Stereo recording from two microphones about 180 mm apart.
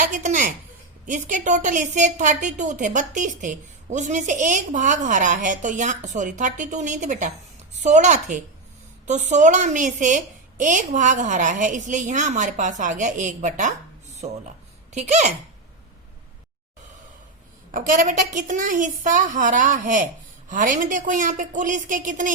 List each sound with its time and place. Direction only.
0.0 s a woman's voice: 45° right (ahead or behind)
17.7 s a woman's voice: 45° right (ahead or behind)